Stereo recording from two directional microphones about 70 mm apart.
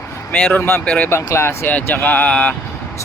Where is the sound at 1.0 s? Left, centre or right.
Left.